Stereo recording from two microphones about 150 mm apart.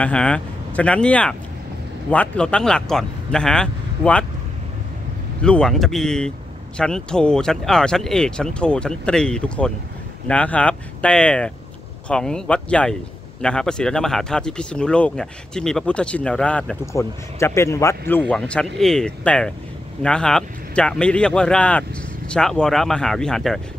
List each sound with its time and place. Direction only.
0.0 s speech: 5° left (ahead or behind)
5.4 s speech: 5° left (ahead or behind)
16.8 s speech: 20° left (ahead or behind)
18.3 s speech: 5° left (ahead or behind)